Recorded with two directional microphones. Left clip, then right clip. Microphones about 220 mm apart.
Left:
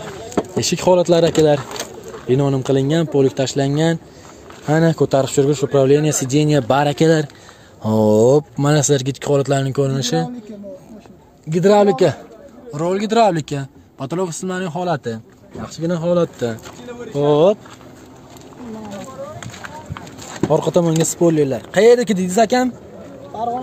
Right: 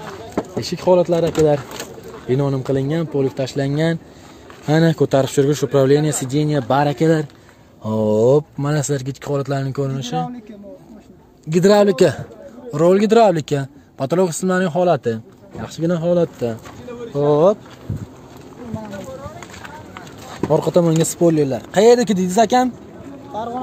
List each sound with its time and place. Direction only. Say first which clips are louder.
0.6 s speech: left 1 dB; 25° left (ahead or behind)
2.2 s speech: left 2 dB; 10° left (ahead or behind)
4.6 s speech: even; 5° right (ahead or behind); by 9.9 s 15° left (ahead or behind)
9.9 s speech: left 4 dB; 30° left (ahead or behind)
11.5 s a man's voice: even; 10° right (ahead or behind)
16.0 s speech: left 1 dB; centre (ahead or behind)
20.5 s speech: right 1 dB; centre (ahead or behind)